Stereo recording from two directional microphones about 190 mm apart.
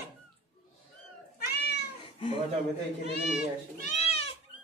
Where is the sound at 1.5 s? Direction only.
60° left (ahead or behind).